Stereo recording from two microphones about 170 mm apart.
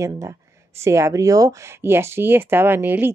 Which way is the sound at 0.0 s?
15° right (ahead or behind).